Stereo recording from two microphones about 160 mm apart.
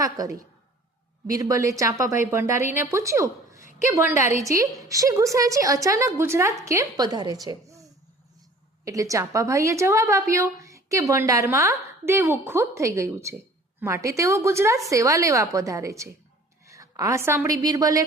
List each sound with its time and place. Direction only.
0.0 s a woman's voice: 20° right (ahead or behind)